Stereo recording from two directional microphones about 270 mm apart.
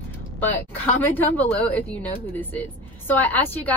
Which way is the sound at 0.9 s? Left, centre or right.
Centre.